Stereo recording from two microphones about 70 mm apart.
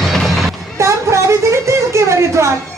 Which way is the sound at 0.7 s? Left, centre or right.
Right.